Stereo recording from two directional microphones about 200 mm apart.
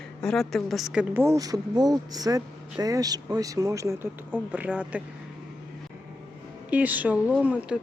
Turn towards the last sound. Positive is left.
turn(degrees=-5)  # may be behind; listen again after turning